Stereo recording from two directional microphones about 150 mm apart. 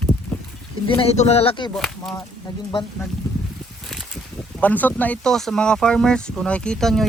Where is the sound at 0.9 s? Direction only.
40° left (ahead or behind).